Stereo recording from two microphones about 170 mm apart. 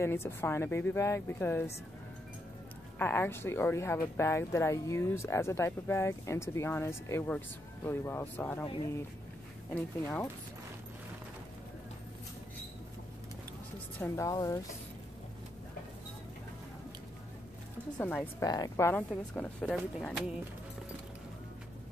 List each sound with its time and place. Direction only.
0.0 s speech: 15° left (ahead or behind)
3.0 s speech: 10° left (ahead or behind)
9.8 s speech: 10° left (ahead or behind)
13.9 s speech: 15° left (ahead or behind)
17.9 s speech: 10° left (ahead or behind)